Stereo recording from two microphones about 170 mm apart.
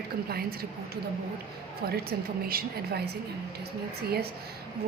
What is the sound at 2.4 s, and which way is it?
Speech, 65° right (ahead or behind).